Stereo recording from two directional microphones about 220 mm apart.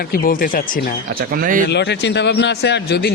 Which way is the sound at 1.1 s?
40° right (ahead or behind).